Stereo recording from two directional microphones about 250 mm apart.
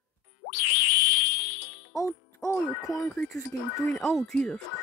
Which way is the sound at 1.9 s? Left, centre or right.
Centre.